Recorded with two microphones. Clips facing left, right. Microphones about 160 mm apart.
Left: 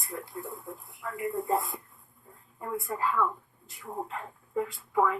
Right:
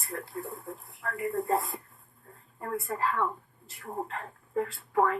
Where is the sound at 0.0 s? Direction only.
Centre (ahead or behind).